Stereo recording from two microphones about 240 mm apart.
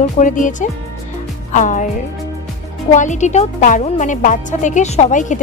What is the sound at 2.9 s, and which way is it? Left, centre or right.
A woman's voice, left.